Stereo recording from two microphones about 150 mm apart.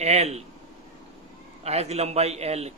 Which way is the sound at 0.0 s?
45° right (ahead or behind).